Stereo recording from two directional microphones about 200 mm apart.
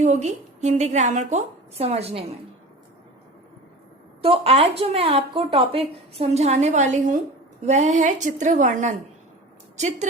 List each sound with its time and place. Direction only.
0.0 s speech: 35° right (ahead or behind)
4.2 s speech: 30° right (ahead or behind)